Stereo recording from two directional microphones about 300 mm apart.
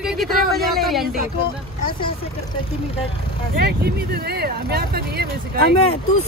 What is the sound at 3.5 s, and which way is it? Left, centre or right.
Speech, right.